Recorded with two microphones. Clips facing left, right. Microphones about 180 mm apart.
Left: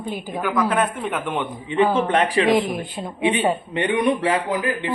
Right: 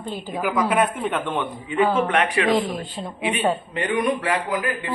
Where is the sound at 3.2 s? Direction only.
25° left (ahead or behind).